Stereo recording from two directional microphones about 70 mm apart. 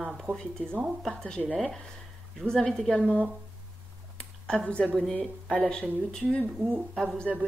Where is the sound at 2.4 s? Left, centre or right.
Centre.